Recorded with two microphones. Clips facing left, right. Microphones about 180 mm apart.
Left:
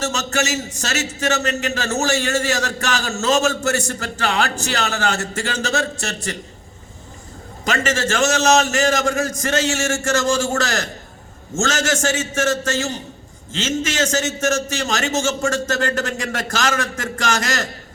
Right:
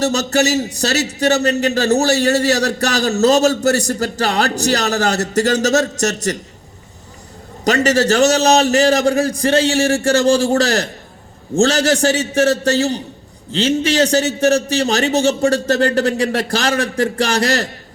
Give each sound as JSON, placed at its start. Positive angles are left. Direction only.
{"t": 0.0, "sound": "a man's voice", "side_deg": -35}
{"t": 7.6, "sound": "a man's voice", "side_deg": -40}